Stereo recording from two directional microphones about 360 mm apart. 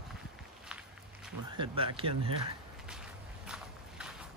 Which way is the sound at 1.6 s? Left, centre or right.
Centre.